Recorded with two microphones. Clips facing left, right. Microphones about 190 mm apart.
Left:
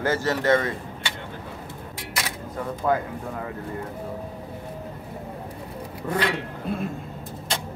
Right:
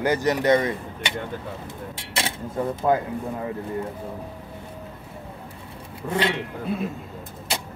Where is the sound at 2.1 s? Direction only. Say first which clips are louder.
Right 3 dB; 25° right (ahead or behind).